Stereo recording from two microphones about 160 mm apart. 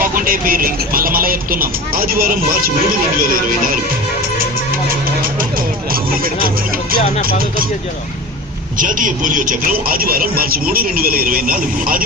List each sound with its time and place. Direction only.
0.0 s speech: 60° right (ahead or behind)
5.9 s speech: 65° right (ahead or behind)
8.8 s speech: 55° right (ahead or behind)